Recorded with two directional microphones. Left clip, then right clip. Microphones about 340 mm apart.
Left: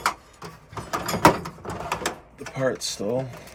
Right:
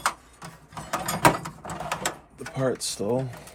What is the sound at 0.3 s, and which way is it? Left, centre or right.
Printer, centre.